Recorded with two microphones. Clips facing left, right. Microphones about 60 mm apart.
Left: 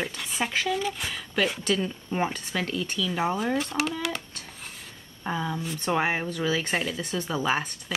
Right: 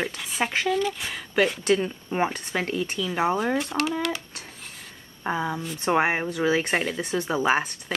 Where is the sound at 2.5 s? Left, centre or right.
Right.